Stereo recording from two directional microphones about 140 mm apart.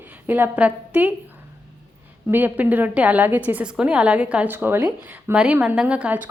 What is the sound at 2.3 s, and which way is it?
A woman's voice, 10° right (ahead or behind).